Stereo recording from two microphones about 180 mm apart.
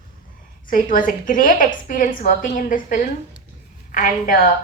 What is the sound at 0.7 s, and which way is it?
A woman's voice, 50° left (ahead or behind).